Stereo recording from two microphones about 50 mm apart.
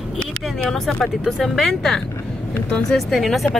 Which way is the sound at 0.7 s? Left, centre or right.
Centre.